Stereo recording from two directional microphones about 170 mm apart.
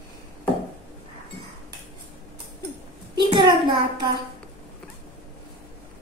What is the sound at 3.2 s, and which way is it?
Speech, 25° right (ahead or behind).